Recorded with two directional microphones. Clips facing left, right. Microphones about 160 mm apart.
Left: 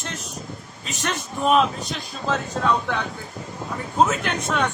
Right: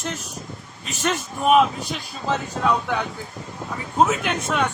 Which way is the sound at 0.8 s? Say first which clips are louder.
Right 3 dB; 5° right (ahead or behind).